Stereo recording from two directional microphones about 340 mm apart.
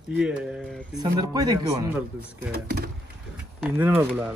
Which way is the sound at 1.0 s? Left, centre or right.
Centre.